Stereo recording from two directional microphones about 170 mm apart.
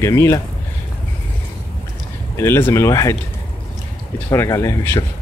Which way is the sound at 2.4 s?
15° left (ahead or behind).